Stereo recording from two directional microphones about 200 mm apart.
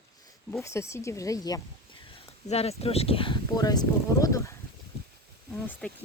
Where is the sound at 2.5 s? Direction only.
30° left (ahead or behind).